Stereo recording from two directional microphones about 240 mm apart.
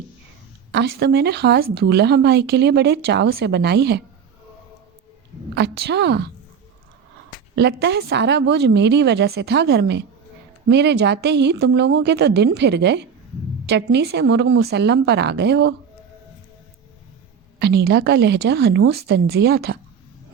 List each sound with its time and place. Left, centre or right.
0.7 s speech: right
5.8 s speech: right
7.5 s speech: right
17.6 s speech: right